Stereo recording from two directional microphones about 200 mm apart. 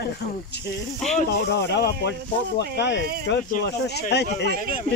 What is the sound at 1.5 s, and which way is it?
Speech, 60° left (ahead or behind).